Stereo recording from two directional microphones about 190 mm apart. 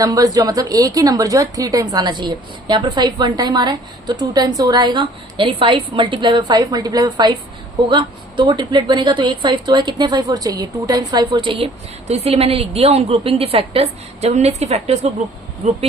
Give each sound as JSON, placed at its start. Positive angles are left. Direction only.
{"t": 0.0, "sound": "a woman's voice", "side_deg": -20}